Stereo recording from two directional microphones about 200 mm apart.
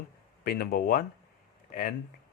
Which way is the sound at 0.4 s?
50° left (ahead or behind).